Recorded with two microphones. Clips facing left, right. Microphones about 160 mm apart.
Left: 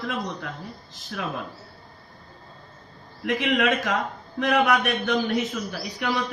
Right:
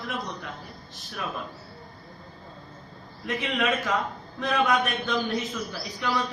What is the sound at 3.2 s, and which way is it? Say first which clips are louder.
Speech: left 4 dB; 90° left.